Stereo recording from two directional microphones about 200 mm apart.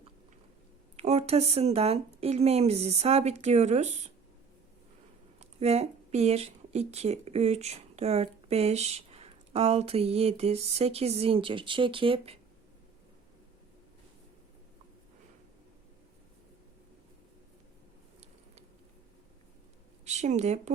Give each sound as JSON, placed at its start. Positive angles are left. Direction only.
{"t": 0.9, "sound": "speech", "side_deg": -35}
{"t": 5.4, "sound": "speech", "side_deg": -30}
{"t": 20.1, "sound": "speech", "side_deg": -35}